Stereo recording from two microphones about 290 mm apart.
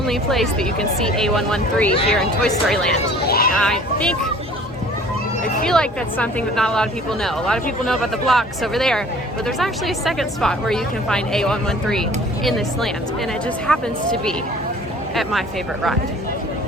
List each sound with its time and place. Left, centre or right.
0.1 s speech: centre
3.2 s a sound: left
3.5 s speech: centre
5.6 s speech: centre